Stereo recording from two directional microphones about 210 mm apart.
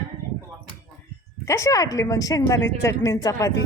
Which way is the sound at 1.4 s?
15° left (ahead or behind).